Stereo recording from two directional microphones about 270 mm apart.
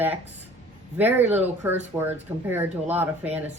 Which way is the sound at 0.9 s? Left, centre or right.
Centre.